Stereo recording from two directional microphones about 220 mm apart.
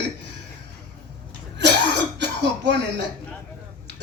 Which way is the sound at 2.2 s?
50° right (ahead or behind).